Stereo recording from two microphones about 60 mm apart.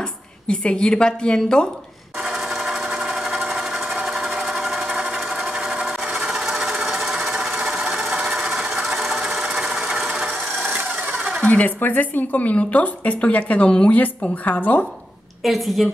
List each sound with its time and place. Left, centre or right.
0.5 s a woman's voice: centre
2.2 s sewing machine: centre
11.4 s a woman's voice: left
15.4 s a woman's voice: centre